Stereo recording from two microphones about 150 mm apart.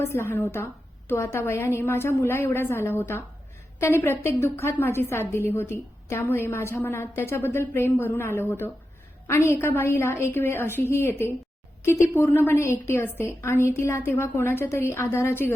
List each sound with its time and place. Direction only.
0.0 s a woman's voice: 15° left (ahead or behind)